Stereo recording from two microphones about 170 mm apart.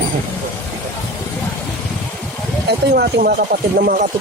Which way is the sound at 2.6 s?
65° right (ahead or behind).